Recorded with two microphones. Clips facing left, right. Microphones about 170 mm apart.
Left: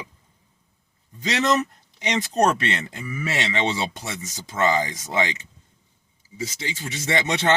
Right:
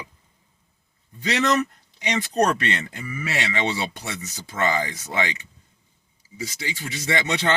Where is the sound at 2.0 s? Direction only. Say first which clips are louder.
Left 1 dB; 20° left (ahead or behind).